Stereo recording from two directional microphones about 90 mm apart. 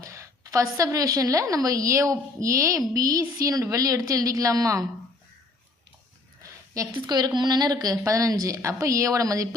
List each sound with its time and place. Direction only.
0.0 s a woman's voice: 35° right (ahead or behind)
6.9 s a woman's voice: 50° right (ahead or behind)